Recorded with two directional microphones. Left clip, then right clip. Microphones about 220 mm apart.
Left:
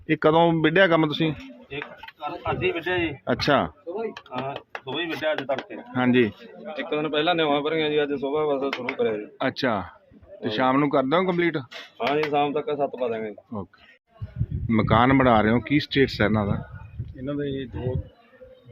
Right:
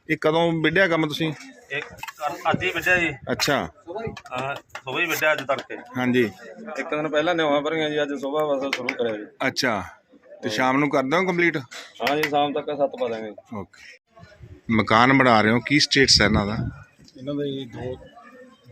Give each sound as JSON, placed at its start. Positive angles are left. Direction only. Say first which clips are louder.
{"t": 0.1, "sound": "speech", "louder": "left 2 dB", "side_deg": 5}
{"t": 2.4, "sound": "speech", "louder": "right 3 dB", "side_deg": -5}
{"t": 4.1, "sound": "speech", "louder": "right 2 dB", "side_deg": 35}
{"t": 4.9, "sound": "speech", "louder": "right 5 dB", "side_deg": -10}
{"t": 5.9, "sound": "speech", "louder": "left 1 dB", "side_deg": 0}
{"t": 14.7, "sound": "speech", "louder": "right 3 dB", "side_deg": -5}